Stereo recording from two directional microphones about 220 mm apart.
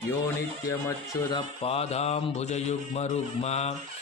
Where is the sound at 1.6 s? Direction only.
25° left (ahead or behind).